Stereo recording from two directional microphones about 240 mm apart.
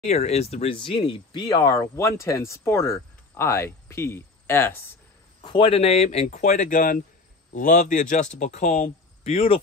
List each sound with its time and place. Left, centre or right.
0.0 s speech: left; by 4.7 s centre
5.4 s speech: left